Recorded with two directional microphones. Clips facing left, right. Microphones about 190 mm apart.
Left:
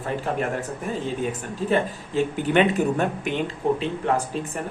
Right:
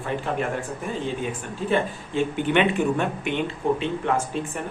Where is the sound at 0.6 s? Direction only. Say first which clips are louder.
Left 1 dB; 40° left (ahead or behind).